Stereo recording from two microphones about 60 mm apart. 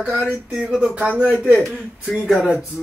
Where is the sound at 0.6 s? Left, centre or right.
Centre.